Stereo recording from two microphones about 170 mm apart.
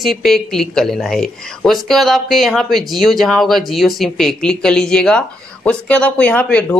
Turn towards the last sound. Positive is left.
turn(degrees=5)  # may be behind; listen again after turning